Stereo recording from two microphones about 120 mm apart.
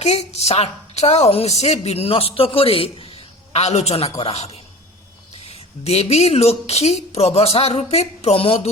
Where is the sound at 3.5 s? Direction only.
65° left (ahead or behind).